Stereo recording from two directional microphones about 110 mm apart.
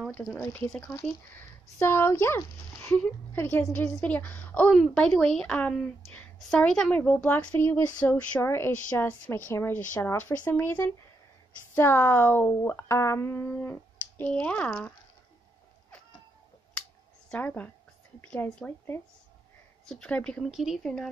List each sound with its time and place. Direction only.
0.1 s speech: 15° left (ahead or behind)
8.4 s speech: 25° left (ahead or behind)
17.3 s speech: 15° left (ahead or behind)
20.5 s speech: 5° right (ahead or behind)